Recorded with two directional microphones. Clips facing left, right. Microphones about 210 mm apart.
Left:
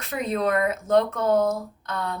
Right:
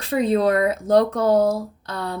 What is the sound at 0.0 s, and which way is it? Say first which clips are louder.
A woman's voice: right 6 dB; 30° right (ahead or behind).